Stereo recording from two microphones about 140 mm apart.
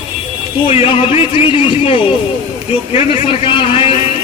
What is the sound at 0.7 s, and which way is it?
Speech, 40° left (ahead or behind).